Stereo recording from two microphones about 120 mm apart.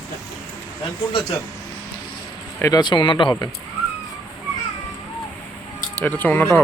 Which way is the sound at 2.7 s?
40° left (ahead or behind).